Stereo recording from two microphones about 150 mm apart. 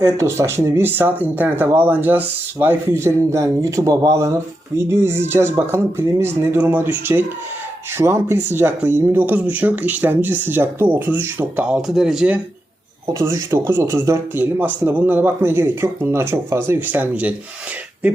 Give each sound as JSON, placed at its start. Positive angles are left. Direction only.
{"t": 0.0, "sound": "speech", "side_deg": -20}
{"t": 13.1, "sound": "speech", "side_deg": -20}